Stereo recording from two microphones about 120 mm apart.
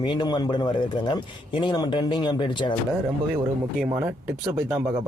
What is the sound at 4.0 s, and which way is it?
Speech, 20° right (ahead or behind).